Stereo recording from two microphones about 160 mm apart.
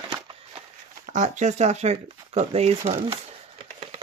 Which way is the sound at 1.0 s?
50° right (ahead or behind).